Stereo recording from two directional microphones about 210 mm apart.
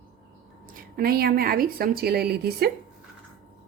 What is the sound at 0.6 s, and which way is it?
A woman's voice, 45° right (ahead or behind).